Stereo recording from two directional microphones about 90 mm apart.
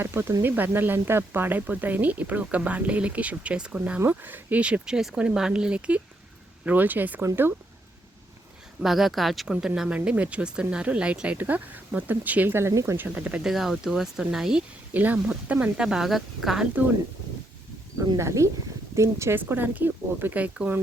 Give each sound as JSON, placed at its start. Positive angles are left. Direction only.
{"t": 0.0, "sound": "speech", "side_deg": -25}
{"t": 8.8, "sound": "speech", "side_deg": -5}
{"t": 13.0, "sound": "speech", "side_deg": -15}
{"t": 14.9, "sound": "speech", "side_deg": -15}
{"t": 18.2, "sound": "speech", "side_deg": -35}